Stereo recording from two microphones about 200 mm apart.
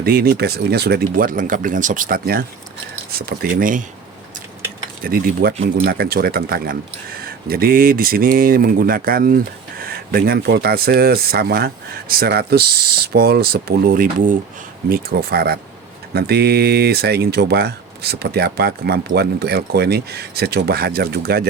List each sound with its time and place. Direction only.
0.0 s speech: 50° right (ahead or behind)
5.0 s speech: 45° right (ahead or behind)